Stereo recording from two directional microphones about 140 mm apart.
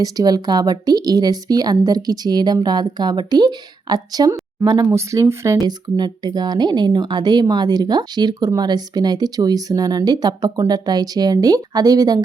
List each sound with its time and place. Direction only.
0.0 s speech: 25° right (ahead or behind)